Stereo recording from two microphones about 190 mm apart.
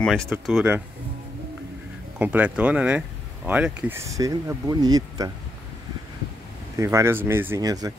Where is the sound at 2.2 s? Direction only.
5° right (ahead or behind).